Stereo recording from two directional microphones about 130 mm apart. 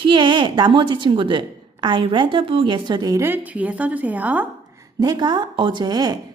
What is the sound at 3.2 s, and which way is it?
A woman's voice, 15° right (ahead or behind).